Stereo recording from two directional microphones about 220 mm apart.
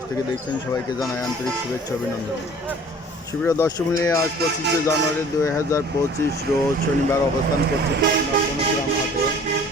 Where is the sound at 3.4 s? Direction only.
15° left (ahead or behind).